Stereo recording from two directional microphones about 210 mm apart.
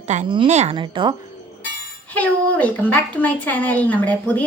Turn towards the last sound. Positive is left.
turn(degrees=5)  # may be behind; listen again after turning